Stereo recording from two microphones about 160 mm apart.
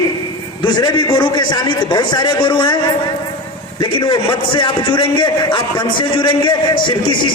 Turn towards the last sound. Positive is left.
turn(degrees=30)  # may be behind; listen again after turning